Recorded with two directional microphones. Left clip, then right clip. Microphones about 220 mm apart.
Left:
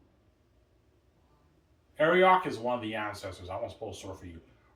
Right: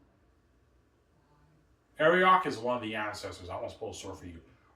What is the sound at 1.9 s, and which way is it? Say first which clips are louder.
Speech: even; 15° left (ahead or behind).